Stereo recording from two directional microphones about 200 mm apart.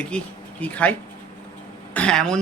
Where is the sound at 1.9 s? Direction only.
5° left (ahead or behind).